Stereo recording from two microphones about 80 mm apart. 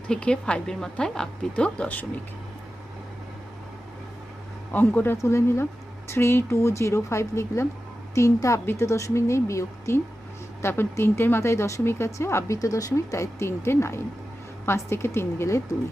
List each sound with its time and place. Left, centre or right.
0.1 s a woman's voice: centre
4.7 s speech: left
5.1 s speech: left